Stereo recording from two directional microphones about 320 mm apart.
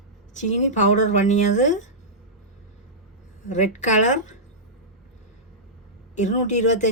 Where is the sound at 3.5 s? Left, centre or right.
Left.